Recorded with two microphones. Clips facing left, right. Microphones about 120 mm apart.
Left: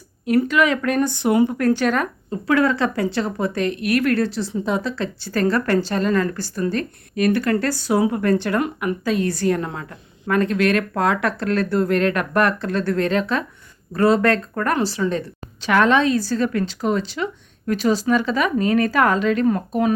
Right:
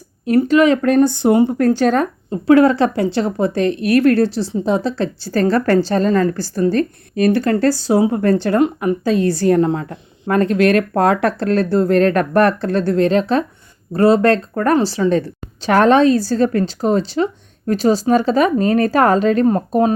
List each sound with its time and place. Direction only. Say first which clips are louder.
0.3 s speech: right 5 dB; 30° right (ahead or behind)